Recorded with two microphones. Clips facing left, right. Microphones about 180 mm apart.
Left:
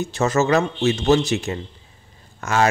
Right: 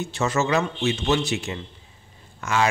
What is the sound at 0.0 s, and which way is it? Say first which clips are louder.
Speech: left 4 dB; 40° left (ahead or behind).